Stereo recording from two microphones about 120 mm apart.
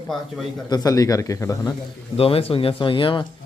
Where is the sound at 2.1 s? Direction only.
55° left (ahead or behind).